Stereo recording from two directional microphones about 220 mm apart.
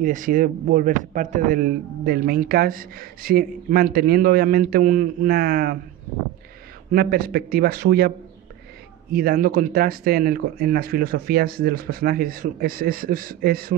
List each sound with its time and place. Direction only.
0.0 s speech: 35° right (ahead or behind)
6.9 s speech: 40° right (ahead or behind)
9.1 s speech: 40° right (ahead or behind)